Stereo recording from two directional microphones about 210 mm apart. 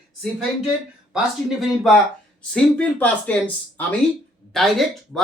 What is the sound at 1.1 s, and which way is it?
Speech, centre (ahead or behind).